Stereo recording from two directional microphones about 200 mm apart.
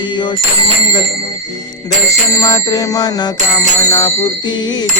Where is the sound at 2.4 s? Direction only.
20° left (ahead or behind).